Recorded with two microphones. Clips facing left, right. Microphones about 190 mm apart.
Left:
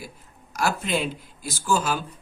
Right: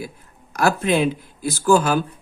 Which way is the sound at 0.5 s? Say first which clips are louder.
Right 7 dB; 60° right (ahead or behind).